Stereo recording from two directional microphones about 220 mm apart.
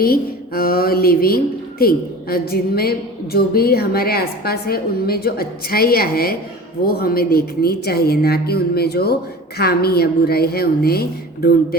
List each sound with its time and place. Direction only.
0.0 s a woman's voice: 45° left (ahead or behind)